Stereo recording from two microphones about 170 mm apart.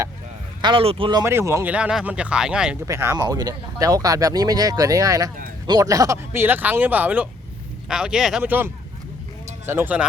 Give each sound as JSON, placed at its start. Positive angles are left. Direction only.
{"t": 0.6, "sound": "speech", "side_deg": -30}
{"t": 1.2, "sound": "speech", "side_deg": -15}
{"t": 2.8, "sound": "speech", "side_deg": -20}